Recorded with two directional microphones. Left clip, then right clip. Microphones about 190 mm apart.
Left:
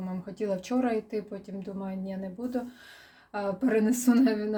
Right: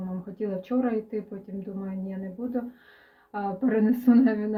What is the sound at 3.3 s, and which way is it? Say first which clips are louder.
Speech: even; 5° left (ahead or behind).